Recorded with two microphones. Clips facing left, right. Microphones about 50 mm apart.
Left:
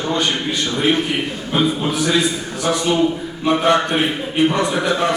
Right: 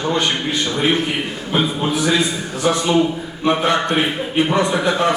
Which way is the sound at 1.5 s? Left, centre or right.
Centre.